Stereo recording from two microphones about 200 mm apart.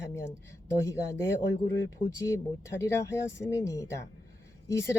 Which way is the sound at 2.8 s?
15° left (ahead or behind).